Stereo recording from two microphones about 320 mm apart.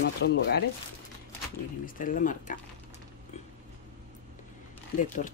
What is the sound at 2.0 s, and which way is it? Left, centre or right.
Speech, left.